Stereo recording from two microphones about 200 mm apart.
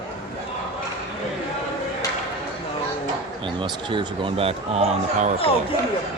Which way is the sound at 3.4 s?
25° right (ahead or behind).